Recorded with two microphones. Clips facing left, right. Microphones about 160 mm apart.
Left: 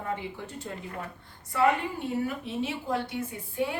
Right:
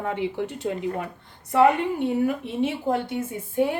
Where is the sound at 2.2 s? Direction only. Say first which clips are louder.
Right 7 dB; 55° right (ahead or behind).